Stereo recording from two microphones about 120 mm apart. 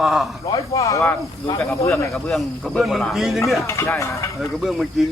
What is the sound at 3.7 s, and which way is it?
Speech, 25° left (ahead or behind).